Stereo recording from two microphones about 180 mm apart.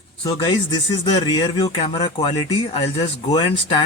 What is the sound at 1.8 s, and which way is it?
Speech, 35° left (ahead or behind).